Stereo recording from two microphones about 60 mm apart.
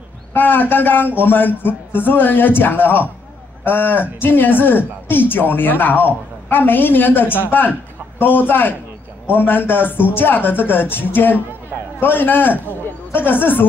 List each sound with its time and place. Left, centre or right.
0.3 s a man's voice: left